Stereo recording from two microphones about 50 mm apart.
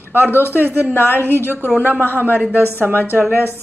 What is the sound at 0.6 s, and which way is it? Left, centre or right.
Speech, right.